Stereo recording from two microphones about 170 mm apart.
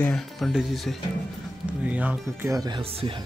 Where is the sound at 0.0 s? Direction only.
5° left (ahead or behind); by 2.8 s 20° right (ahead or behind).